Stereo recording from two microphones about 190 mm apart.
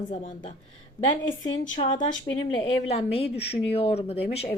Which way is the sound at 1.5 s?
25° left (ahead or behind).